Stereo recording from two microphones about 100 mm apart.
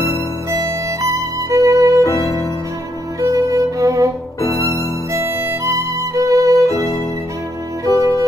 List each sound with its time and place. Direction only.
0.6 s music: 30° right (ahead or behind)
2.0 s music: 30° left (ahead or behind)
3.2 s violin: 35° right (ahead or behind)
4.4 s music: 30° left (ahead or behind)
5.1 s music: 25° right (ahead or behind)
7.8 s music: 35° left (ahead or behind)